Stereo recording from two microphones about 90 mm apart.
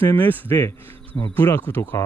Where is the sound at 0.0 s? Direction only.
20° left (ahead or behind).